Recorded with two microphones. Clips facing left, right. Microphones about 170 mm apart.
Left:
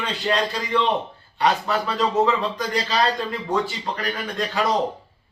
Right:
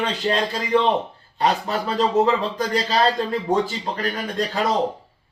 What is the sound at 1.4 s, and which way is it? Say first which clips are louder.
Speech: even; 35° right (ahead or behind).